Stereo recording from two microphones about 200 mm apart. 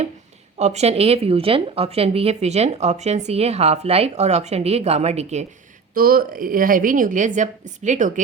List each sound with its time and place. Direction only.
0.6 s a woman's voice: 35° right (ahead or behind)
5.9 s a woman's voice: 45° right (ahead or behind)